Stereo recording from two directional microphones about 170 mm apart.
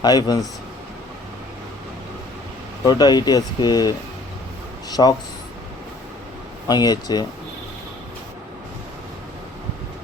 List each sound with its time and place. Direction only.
0.0 s speech: 25° left (ahead or behind)
2.8 s speech: 25° left (ahead or behind)
6.7 s speech: 25° left (ahead or behind)